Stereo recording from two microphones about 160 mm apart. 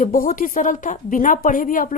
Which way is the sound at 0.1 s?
60° left (ahead or behind).